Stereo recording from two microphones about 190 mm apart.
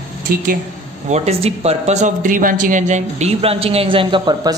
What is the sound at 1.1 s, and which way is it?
Speech, 35° right (ahead or behind).